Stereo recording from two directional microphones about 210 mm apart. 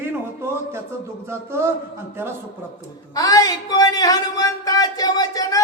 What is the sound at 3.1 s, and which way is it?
Speech, 15° left (ahead or behind).